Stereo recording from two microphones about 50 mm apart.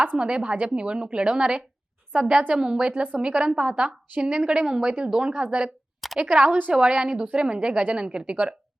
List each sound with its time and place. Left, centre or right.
0.2 s a woman's voice: centre
3.0 s speech: right
3.2 s a woman's voice: centre
6.5 s a woman's voice: right
6.7 s a woman's voice: centre